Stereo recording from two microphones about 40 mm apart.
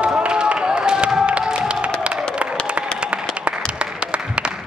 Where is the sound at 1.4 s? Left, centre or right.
Right.